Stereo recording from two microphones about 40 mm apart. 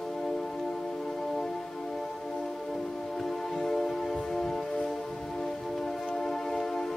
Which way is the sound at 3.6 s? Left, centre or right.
Centre.